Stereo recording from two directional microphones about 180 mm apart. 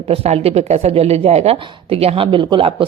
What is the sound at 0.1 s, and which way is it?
A woman's voice, 35° right (ahead or behind).